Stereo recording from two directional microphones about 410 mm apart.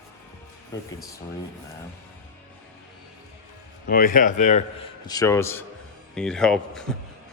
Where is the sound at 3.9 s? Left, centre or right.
Left; by 7.0 s centre.